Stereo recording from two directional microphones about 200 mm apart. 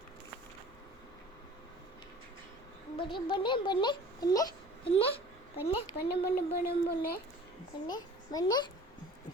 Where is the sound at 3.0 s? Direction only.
25° left (ahead or behind).